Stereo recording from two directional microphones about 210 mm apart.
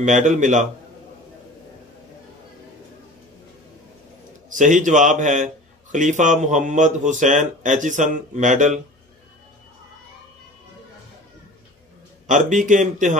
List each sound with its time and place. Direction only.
0.0 s speech: 35° right (ahead or behind)
4.5 s a man's voice: 35° right (ahead or behind)
12.3 s speech: 35° right (ahead or behind)